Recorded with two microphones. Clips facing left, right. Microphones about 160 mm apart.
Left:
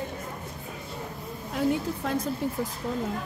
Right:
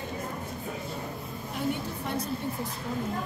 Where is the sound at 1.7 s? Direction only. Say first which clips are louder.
Left 4 dB; 90° left.